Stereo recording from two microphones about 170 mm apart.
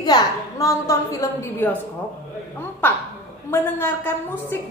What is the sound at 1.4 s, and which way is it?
Speech, 15° left (ahead or behind).